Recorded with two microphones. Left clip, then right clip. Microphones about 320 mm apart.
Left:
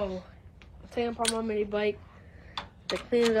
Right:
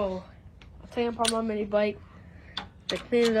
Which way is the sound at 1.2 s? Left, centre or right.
Centre.